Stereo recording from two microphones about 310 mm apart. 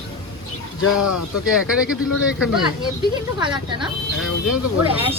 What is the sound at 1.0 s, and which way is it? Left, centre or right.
Speech, left.